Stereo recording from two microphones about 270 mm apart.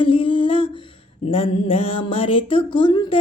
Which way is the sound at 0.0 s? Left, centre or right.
Centre.